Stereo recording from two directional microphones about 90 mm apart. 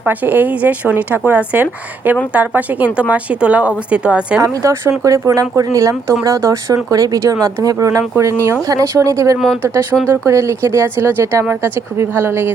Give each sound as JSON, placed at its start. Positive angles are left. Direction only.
{"t": 0.0, "sound": "speech", "side_deg": -20}
{"t": 4.4, "sound": "speech", "side_deg": -35}